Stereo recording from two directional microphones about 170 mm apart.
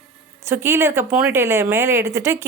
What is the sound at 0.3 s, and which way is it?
A woman's voice, 15° right (ahead or behind).